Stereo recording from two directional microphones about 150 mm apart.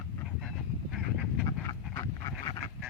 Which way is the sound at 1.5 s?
25° left (ahead or behind).